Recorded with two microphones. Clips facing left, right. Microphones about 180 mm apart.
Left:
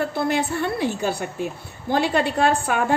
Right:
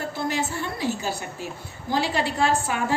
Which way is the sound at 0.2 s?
60° left (ahead or behind).